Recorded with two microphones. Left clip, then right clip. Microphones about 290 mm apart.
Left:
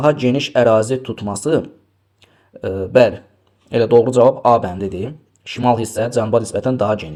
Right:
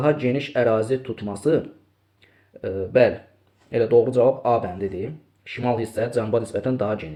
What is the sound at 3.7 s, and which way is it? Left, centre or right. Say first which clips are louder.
Speech: left 5 dB; left.